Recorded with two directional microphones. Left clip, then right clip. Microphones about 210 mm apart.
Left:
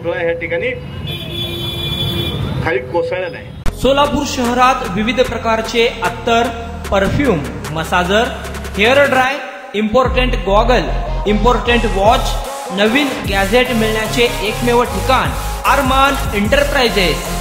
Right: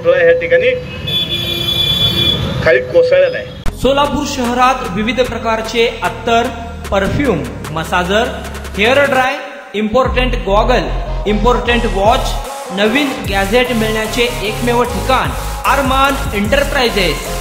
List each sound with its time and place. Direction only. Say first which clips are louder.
0.1 s speech: right 9 dB; 50° left (ahead or behind)
2.6 s speech: right 7 dB; 55° left (ahead or behind)
3.8 s a man's voice: even; centre (ahead or behind)